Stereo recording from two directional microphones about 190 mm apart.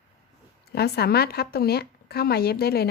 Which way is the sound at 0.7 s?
55° left (ahead or behind).